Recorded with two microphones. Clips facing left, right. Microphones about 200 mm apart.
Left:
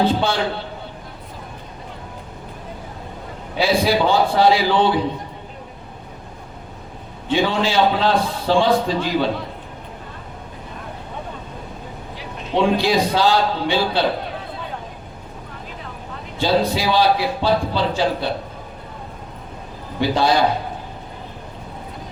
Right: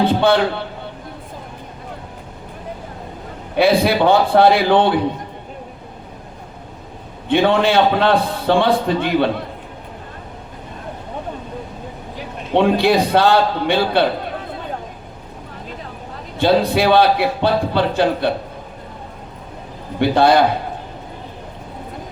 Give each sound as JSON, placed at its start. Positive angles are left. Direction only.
{"t": 0.0, "sound": "music", "side_deg": -60}
{"t": 3.5, "sound": "a man's voice", "side_deg": -60}
{"t": 7.3, "sound": "a man's voice", "side_deg": -60}
{"t": 12.5, "sound": "a man's voice", "side_deg": -60}
{"t": 16.4, "sound": "a man's voice", "side_deg": -60}
{"t": 20.0, "sound": "a man's voice", "side_deg": -60}